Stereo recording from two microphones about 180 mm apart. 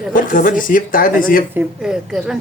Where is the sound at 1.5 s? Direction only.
5° right (ahead or behind).